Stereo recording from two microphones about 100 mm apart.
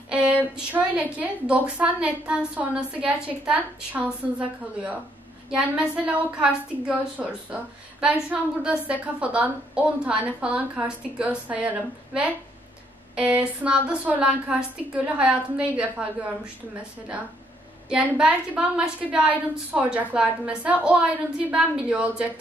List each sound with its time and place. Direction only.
0.1 s a sound: 10° right (ahead or behind)
0.6 s a woman's voice: 15° right (ahead or behind)
5.5 s a woman's voice: 10° right (ahead or behind)
17.8 s a woman's voice: 10° right (ahead or behind)